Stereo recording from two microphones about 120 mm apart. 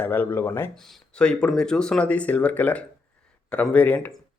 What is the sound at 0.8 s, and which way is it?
Speech, 5° left (ahead or behind).